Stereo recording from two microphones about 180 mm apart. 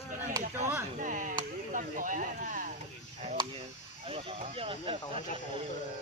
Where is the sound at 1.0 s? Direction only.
45° right (ahead or behind).